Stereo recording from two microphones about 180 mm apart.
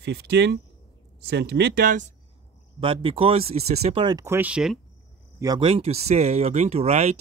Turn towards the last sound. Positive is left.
turn(degrees=-35)  # may be behind; listen again after turning